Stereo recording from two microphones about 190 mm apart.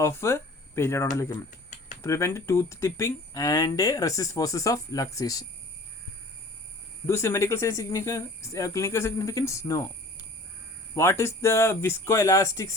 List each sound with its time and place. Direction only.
0.0 s speech: 15° left (ahead or behind)
7.1 s speech: 15° left (ahead or behind)
10.9 s speech: 15° left (ahead or behind)